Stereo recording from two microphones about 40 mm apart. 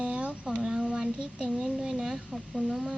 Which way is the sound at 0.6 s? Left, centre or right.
Right.